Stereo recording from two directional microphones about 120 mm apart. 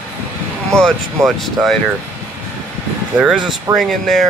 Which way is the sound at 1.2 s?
25° right (ahead or behind).